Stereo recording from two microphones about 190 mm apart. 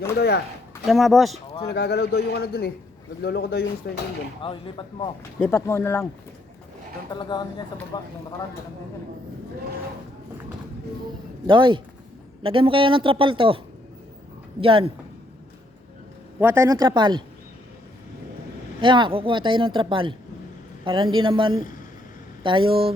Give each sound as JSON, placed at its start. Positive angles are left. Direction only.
{"t": 0.2, "sound": "a man's voice", "side_deg": 60}
{"t": 0.9, "sound": "speech", "side_deg": 0}
{"t": 1.6, "sound": "a man's voice", "side_deg": 60}
{"t": 4.4, "sound": "speech", "side_deg": 25}
{"t": 5.4, "sound": "speech", "side_deg": 15}
{"t": 7.1, "sound": "speech", "side_deg": 20}
{"t": 11.4, "sound": "speech", "side_deg": -25}
{"t": 14.6, "sound": "speech", "side_deg": -30}
{"t": 16.4, "sound": "speech", "side_deg": -10}
{"t": 18.8, "sound": "speech", "side_deg": -25}